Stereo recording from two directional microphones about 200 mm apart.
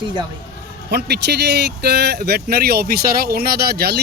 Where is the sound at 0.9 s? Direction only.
55° right (ahead or behind).